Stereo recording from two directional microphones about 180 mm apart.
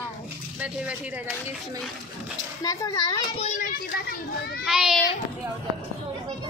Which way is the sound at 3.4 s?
45° left (ahead or behind).